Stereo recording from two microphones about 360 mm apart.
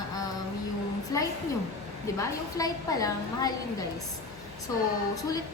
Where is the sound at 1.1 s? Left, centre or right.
Centre.